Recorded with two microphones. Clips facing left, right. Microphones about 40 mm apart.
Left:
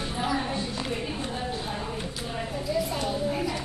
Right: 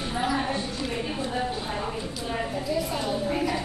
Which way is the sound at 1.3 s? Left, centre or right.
Right.